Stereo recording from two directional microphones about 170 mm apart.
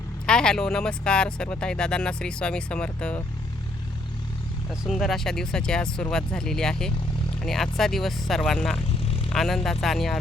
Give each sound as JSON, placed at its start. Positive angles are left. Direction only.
{"t": 0.3, "sound": "speech", "side_deg": 5}
{"t": 4.8, "sound": "speech", "side_deg": 0}
{"t": 9.0, "sound": "vehicle", "side_deg": 35}
{"t": 9.3, "sound": "speech", "side_deg": 0}